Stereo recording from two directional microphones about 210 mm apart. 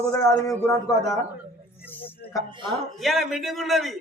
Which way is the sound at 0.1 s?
15° left (ahead or behind).